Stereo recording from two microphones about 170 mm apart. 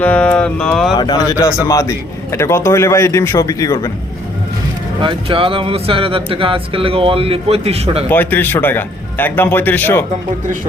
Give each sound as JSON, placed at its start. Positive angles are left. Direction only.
{"t": 0.0, "sound": "music", "side_deg": 5}
{"t": 0.9, "sound": "a man's voice", "side_deg": 25}
{"t": 5.0, "sound": "speech", "side_deg": -30}
{"t": 8.1, "sound": "a man's voice", "side_deg": 10}